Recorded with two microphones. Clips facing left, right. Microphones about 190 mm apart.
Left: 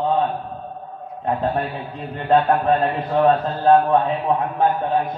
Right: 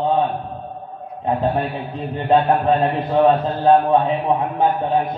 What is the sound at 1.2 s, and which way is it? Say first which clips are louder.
A man's voice: right 2 dB; 15° right (ahead or behind).